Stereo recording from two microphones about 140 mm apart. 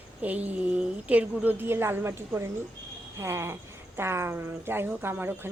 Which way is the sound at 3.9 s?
15° right (ahead or behind).